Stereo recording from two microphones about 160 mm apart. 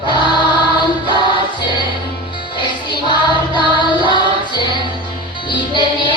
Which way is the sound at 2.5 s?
30° left (ahead or behind).